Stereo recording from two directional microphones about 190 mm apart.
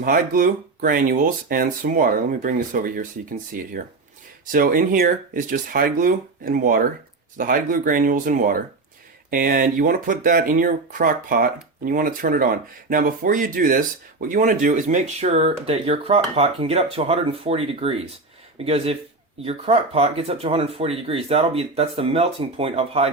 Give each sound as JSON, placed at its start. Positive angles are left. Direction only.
{"t": 0.0, "sound": "speech", "side_deg": -50}